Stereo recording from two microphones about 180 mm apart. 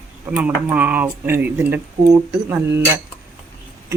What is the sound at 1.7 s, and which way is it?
Speech, 20° right (ahead or behind).